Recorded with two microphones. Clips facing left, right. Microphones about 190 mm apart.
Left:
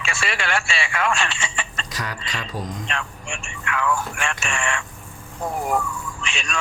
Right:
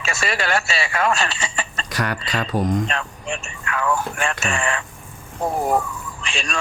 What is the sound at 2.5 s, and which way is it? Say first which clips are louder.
Speech: right 10 dB; 65° right (ahead or behind).